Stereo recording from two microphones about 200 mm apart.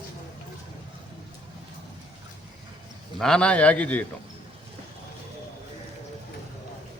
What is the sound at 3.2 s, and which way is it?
Speech, 5° left (ahead or behind).